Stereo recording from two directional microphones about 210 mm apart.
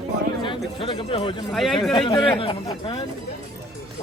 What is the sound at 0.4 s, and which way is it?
Speech, 25° left (ahead or behind).